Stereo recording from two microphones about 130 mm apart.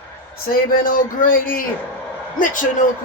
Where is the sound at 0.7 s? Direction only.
90° left.